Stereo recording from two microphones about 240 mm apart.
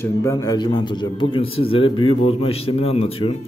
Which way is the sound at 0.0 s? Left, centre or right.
Centre.